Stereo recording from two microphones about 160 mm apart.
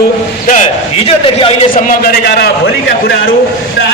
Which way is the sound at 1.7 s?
65° left (ahead or behind).